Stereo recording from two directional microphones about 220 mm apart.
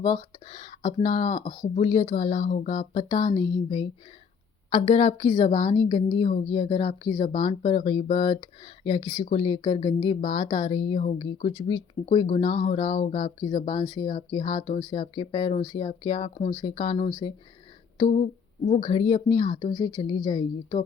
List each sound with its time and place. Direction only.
0.0 s speech: 25° left (ahead or behind)